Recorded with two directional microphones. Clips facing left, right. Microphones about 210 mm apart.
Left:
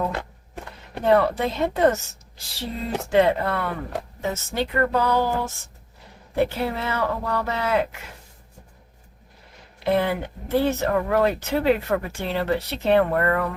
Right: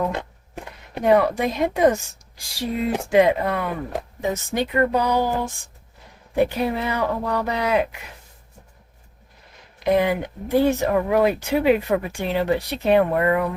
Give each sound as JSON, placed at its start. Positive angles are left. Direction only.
{"t": 0.0, "sound": "speech", "side_deg": -20}
{"t": 9.8, "sound": "speech", "side_deg": -15}